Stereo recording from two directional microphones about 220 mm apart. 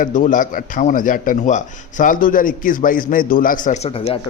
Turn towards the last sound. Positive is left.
turn(degrees=30)  # may be behind; listen again after turning